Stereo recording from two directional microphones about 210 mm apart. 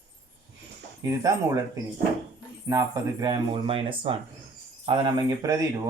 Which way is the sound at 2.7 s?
15° right (ahead or behind).